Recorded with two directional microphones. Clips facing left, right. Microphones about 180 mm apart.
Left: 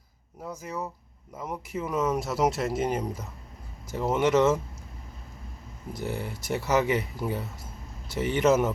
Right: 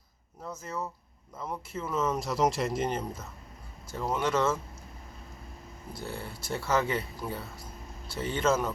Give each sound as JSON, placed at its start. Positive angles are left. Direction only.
{"t": 0.6, "sound": "speech", "side_deg": 15}
{"t": 3.9, "sound": "speech", "side_deg": 20}
{"t": 5.9, "sound": "speech", "side_deg": 20}